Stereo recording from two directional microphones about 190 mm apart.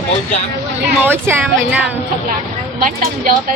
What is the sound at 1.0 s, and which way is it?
Speech, 10° right (ahead or behind).